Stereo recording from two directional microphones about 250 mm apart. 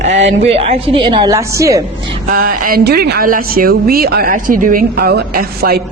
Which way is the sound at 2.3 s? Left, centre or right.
Right.